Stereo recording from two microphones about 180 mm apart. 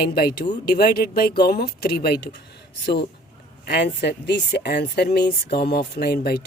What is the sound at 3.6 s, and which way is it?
A woman's voice, 65° left (ahead or behind).